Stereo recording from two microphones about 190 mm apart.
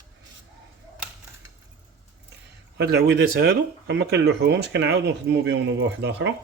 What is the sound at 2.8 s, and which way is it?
Speech, 60° right (ahead or behind).